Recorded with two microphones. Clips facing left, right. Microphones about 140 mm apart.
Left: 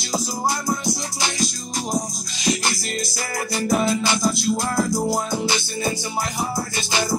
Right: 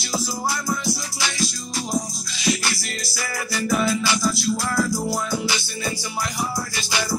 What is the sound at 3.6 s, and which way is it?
Music, 35° left (ahead or behind).